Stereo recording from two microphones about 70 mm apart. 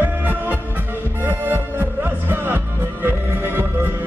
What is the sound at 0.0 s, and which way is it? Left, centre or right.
Music, right.